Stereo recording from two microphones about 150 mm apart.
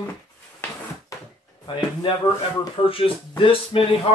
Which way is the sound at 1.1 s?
20° left (ahead or behind).